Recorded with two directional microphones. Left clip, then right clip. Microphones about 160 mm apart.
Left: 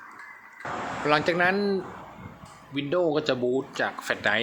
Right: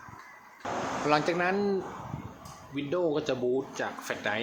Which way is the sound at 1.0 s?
10° left (ahead or behind).